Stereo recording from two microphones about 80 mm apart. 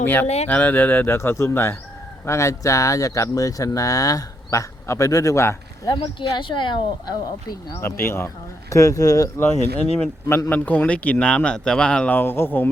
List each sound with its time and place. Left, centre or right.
0.0 s speech: left
5.9 s speech: left
7.7 s speech: left
8.7 s speech: left
9.4 s speech: left; by 12.1 s centre
12.1 s speech: left